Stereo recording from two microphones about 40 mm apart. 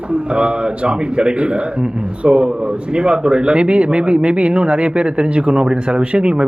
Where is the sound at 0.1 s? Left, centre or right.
Right.